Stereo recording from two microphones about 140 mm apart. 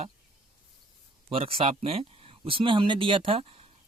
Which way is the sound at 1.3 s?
40° right (ahead or behind).